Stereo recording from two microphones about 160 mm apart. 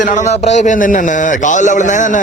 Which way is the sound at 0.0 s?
50° left (ahead or behind).